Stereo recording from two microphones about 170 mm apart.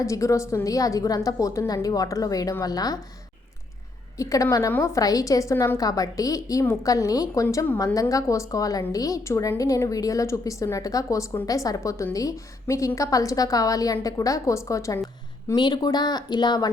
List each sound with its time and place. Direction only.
0.0 s a woman's voice: 20° left (ahead or behind)
4.2 s a woman's voice: 20° left (ahead or behind)